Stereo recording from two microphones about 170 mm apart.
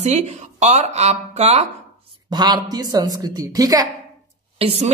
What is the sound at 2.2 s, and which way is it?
A woman's voice, 25° right (ahead or behind).